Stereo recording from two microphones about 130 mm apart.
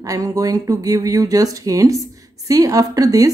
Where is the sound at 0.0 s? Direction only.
25° right (ahead or behind).